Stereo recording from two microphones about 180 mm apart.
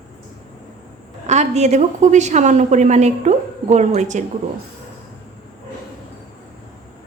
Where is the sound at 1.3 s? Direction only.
40° right (ahead or behind).